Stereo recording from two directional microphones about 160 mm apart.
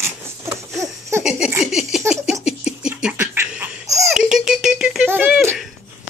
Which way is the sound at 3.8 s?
20° right (ahead or behind).